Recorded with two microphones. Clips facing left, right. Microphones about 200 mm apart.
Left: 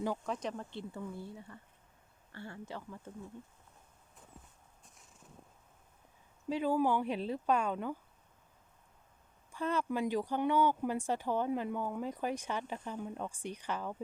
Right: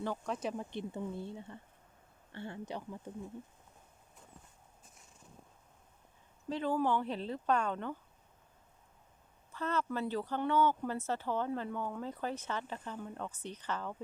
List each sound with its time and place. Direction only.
0.3 s speech: 5° right (ahead or behind)
6.5 s speech: 10° left (ahead or behind)
9.5 s speech: 10° left (ahead or behind)